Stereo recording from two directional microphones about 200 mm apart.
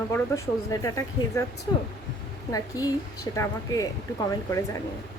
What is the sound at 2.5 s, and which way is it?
A woman's voice, 15° left (ahead or behind).